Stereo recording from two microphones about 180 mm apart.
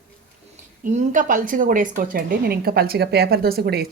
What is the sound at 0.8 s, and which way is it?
A woman's voice, 45° right (ahead or behind).